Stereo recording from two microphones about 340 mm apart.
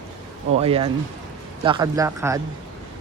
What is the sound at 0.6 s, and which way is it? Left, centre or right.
Speech, centre.